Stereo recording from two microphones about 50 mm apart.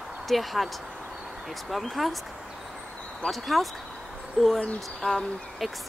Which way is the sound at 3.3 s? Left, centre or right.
Centre.